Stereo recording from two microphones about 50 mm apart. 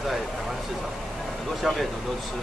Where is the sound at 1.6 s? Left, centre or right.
Centre.